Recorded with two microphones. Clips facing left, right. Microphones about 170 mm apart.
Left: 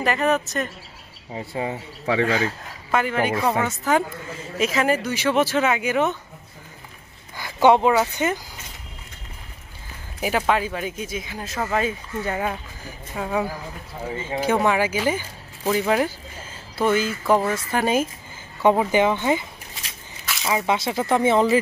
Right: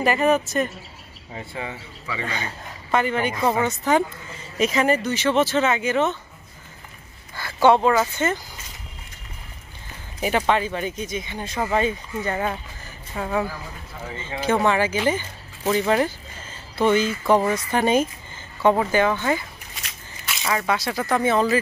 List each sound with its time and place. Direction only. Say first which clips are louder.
0.0 s speech: right 2 dB; 5° right (ahead or behind)
1.4 s speech: left 5 dB; 35° left (ahead or behind)
2.0 s speech: left 10 dB; 70° left (ahead or behind)
2.3 s speech: left 7 dB; 5° left (ahead or behind)
7.3 s speech: left 1 dB; 15° left (ahead or behind)
10.2 s speech: right 1 dB; 5° left (ahead or behind)
18.6 s speech: left 1 dB; 15° left (ahead or behind)
20.4 s speech: left 1 dB; 20° left (ahead or behind)